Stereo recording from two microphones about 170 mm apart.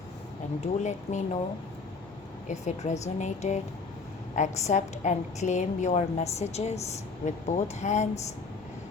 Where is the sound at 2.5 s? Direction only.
45° left (ahead or behind).